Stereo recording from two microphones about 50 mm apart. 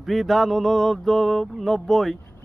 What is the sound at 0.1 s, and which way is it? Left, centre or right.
Mantra, centre.